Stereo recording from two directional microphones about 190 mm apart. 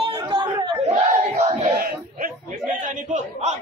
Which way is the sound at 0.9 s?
35° right (ahead or behind).